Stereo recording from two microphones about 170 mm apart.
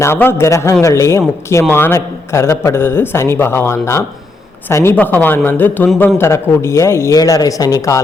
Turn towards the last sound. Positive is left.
turn(degrees=20)  # may be behind; listen again after turning